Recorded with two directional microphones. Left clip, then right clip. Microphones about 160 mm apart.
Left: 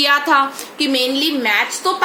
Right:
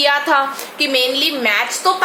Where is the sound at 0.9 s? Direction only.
20° left (ahead or behind).